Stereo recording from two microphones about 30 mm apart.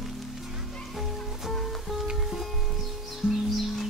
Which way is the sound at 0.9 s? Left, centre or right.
Centre.